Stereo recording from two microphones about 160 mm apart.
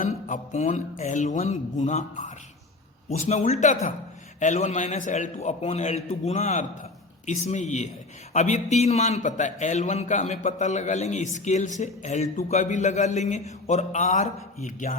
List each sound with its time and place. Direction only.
0.3 s a man's voice: 45° left (ahead or behind)